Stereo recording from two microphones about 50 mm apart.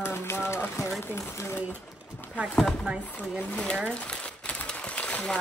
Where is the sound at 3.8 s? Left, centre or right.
Left.